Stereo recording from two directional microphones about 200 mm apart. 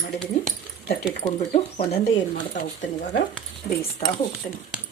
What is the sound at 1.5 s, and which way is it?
Speech, 30° left (ahead or behind).